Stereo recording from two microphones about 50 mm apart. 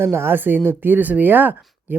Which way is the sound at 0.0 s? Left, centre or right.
Right.